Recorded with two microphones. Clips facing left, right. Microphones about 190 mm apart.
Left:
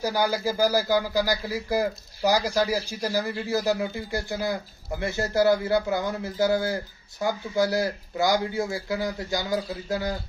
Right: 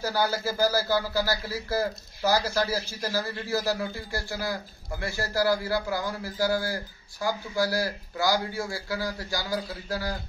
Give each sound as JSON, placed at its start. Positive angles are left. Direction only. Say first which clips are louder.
{"t": 0.0, "sound": "speech", "louder": "left 2 dB", "side_deg": 15}